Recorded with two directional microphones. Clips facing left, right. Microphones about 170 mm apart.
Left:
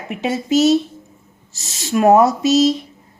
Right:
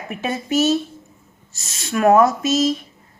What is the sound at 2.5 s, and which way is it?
Speech, 80° left.